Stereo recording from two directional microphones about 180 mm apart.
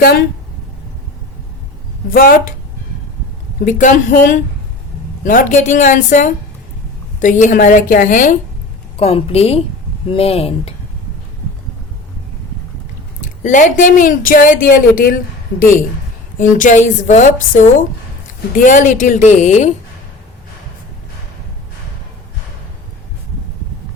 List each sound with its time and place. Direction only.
2.1 s speech: 50° left (ahead or behind)
3.6 s speech: 45° left (ahead or behind)
5.2 s speech: 45° left (ahead or behind)
9.0 s a woman's voice: 35° left (ahead or behind)
13.2 s speech: 45° left (ahead or behind)